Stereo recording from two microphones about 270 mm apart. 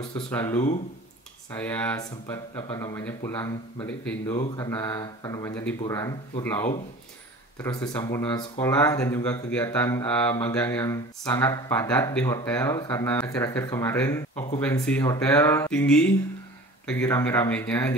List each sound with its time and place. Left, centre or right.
0.3 s speech: centre
1.6 s speech: centre